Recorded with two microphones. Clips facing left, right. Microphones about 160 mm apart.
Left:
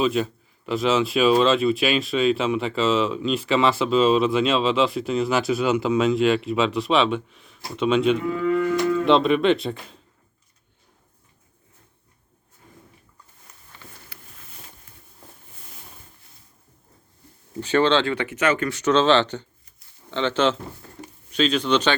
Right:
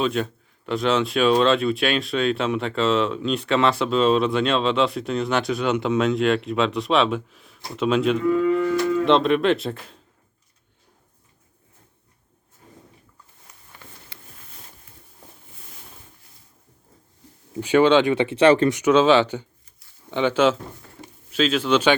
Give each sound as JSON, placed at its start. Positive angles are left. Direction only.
{"t": 0.0, "sound": "speech", "side_deg": 0}
{"t": 12.6, "sound": "walk", "side_deg": -30}
{"t": 14.1, "sound": "a sound", "side_deg": -20}
{"t": 17.5, "sound": "speech", "side_deg": -10}
{"t": 18.7, "sound": "speech", "side_deg": -10}